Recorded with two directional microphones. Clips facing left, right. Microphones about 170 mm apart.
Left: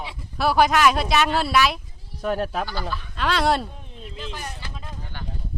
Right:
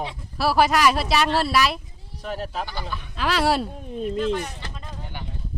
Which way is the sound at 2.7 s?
20° right (ahead or behind).